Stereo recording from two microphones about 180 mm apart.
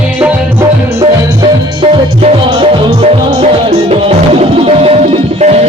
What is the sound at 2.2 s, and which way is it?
Music, 35° right (ahead or behind).